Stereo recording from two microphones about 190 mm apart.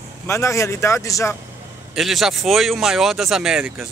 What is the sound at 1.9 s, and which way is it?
Speech, centre (ahead or behind).